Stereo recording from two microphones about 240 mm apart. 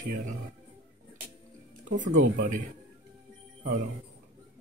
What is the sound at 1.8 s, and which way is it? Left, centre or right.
Speech, right.